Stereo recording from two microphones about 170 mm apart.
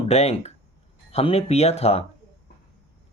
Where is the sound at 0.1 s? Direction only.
40° left (ahead or behind).